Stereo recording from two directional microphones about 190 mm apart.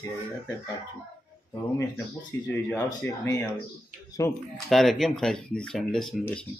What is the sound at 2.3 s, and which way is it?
Speech, 15° left (ahead or behind).